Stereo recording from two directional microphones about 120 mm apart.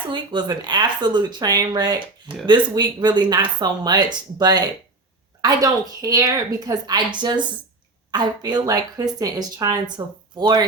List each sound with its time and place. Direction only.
0.1 s speech: 40° right (ahead or behind)